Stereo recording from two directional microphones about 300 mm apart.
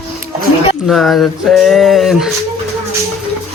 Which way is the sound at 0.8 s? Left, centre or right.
Centre.